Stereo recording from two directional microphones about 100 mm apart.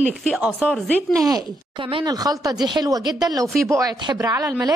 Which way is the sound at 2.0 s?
40° right (ahead or behind).